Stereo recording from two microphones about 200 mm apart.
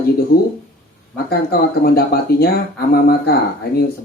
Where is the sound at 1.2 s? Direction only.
50° left (ahead or behind).